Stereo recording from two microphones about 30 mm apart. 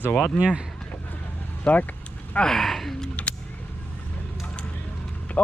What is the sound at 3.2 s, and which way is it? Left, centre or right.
Music, left.